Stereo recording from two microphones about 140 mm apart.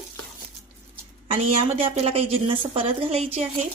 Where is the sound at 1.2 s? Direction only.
40° right (ahead or behind).